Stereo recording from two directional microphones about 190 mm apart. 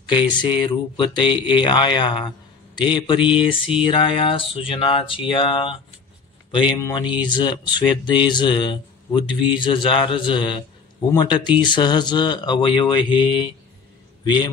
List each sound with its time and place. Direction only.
0.1 s speech: 25° left (ahead or behind)
6.8 s a man's voice: 25° left (ahead or behind)